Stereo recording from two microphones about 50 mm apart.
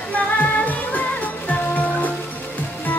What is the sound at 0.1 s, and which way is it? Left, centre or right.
Music, left.